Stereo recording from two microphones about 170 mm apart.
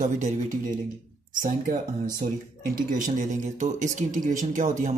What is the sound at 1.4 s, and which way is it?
Speech, 55° right (ahead or behind).